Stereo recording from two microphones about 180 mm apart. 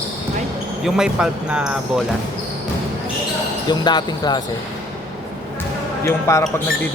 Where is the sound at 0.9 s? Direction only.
5° right (ahead or behind).